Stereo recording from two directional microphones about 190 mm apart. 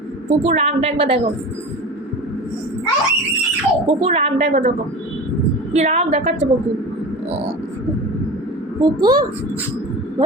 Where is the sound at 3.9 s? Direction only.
30° right (ahead or behind).